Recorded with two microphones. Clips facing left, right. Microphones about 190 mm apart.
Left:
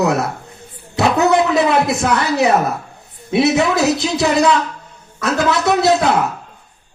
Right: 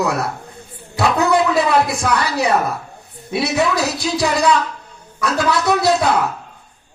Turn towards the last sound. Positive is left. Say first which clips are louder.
# left 2 dB
turn(degrees=20)  # may be behind; listen again after turning